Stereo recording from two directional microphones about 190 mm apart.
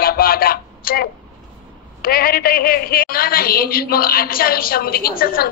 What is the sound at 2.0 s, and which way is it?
A woman's voice, 50° left (ahead or behind).